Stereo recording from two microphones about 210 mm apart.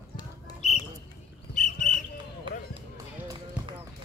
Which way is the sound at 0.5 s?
35° left (ahead or behind).